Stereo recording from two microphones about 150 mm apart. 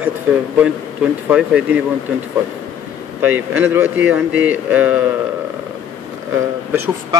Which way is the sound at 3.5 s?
15° right (ahead or behind).